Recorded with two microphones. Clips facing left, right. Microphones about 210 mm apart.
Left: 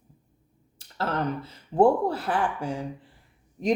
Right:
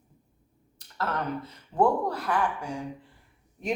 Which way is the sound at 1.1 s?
45° left (ahead or behind).